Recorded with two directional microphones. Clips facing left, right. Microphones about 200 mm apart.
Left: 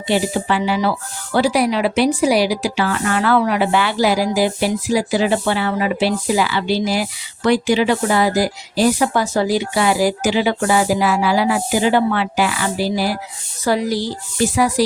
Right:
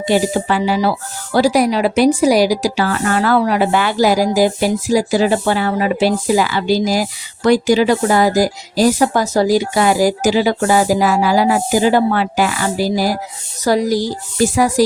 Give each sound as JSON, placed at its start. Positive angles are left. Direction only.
{"t": 0.0, "sound": "speech", "side_deg": -45}